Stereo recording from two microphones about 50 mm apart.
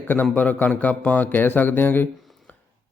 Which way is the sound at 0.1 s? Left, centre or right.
Left.